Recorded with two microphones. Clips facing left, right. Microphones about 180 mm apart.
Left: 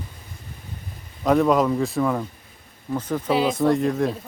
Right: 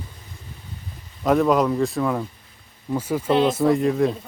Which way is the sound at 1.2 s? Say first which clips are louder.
Even; centre (ahead or behind).